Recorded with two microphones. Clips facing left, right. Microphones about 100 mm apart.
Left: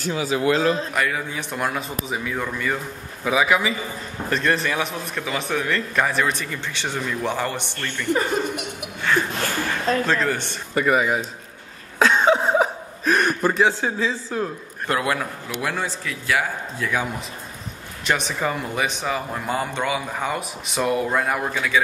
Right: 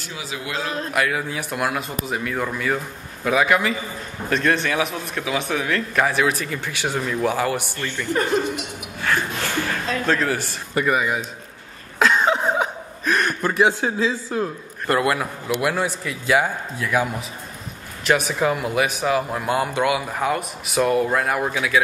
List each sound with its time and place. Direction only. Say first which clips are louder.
0.1 s speech: left 9 dB; 45° left (ahead or behind)
0.9 s speech: right 2 dB; 5° right (ahead or behind)
10.0 s speech: right 1 dB; 5° right (ahead or behind)
12.0 s a sound: left 1 dB; centre (ahead or behind)
13.6 s a man's voice: right 1 dB; 15° right (ahead or behind)
14.9 s speech: right 3 dB; centre (ahead or behind)
15.1 s a man's voice: right 4 dB; 15° right (ahead or behind)
16.7 s speech: right 3 dB; 5° right (ahead or behind)